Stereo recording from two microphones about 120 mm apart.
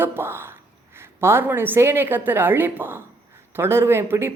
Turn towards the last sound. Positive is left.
turn(degrees=-20)  # may be behind; listen again after turning